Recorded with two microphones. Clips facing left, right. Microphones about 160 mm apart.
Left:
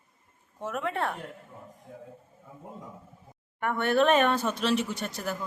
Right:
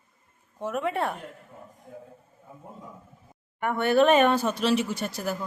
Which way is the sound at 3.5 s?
5° right (ahead or behind).